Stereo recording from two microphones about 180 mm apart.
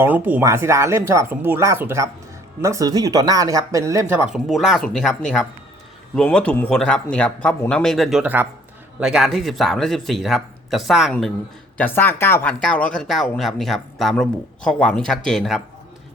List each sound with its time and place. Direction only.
0.0 s speech: 10° right (ahead or behind)
4.1 s speech: 5° right (ahead or behind)
11.8 s speech: 10° left (ahead or behind)